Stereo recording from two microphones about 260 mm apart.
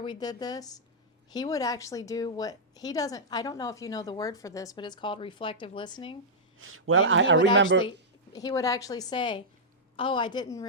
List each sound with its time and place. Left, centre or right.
0.0 s speech: centre
6.6 s a man's voice: right
7.8 s speech: centre